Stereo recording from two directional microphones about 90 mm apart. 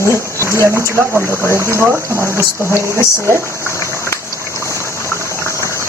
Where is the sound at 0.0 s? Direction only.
35° right (ahead or behind).